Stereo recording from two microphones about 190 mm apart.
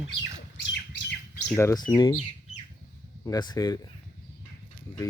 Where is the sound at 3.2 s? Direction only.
20° left (ahead or behind).